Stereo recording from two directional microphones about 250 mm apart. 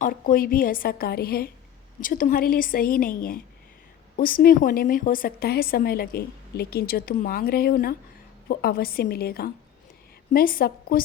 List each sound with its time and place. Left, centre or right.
0.0 s a woman's voice: left